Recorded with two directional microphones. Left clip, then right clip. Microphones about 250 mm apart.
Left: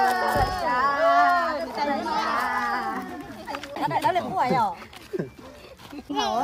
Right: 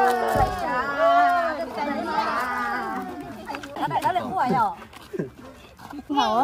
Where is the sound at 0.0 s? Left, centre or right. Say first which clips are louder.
Right 1 dB; centre.